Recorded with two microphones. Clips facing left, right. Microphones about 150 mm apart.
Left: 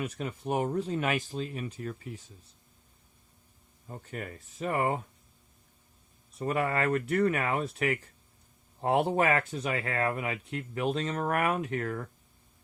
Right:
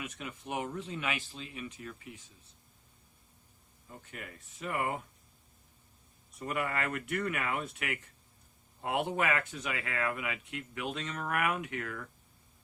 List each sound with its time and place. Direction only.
0.0 s speech: 35° left (ahead or behind)
3.8 s speech: 40° left (ahead or behind)
6.4 s speech: 35° left (ahead or behind)